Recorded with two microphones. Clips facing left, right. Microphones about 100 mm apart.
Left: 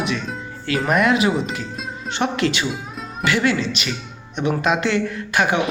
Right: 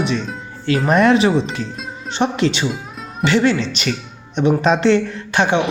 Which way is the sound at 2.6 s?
Centre (ahead or behind).